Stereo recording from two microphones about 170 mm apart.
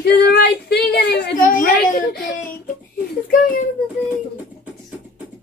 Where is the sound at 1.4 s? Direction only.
50° left (ahead or behind).